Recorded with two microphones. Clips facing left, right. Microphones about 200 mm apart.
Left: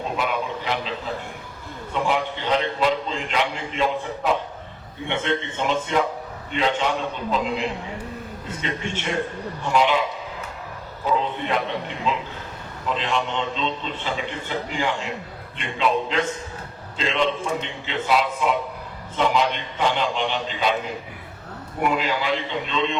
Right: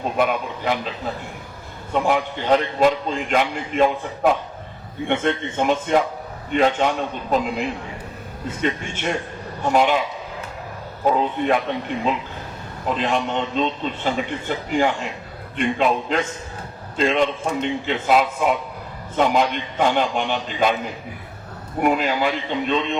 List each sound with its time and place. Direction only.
0.2 s a man's voice: 50° right (ahead or behind)
1.9 s a man's voice: 50° right (ahead or behind)
11.0 s a man's voice: 50° right (ahead or behind)
12.8 s a man's voice: 50° right (ahead or behind)
21.8 s a man's voice: 50° right (ahead or behind)